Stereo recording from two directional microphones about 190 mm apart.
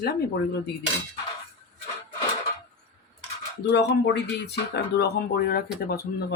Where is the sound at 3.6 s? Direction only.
60° left (ahead or behind).